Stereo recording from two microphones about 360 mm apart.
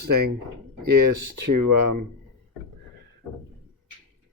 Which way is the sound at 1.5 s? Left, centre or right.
Right.